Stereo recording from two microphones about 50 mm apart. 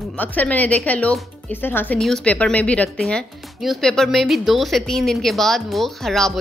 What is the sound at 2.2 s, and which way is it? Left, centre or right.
Speech, left.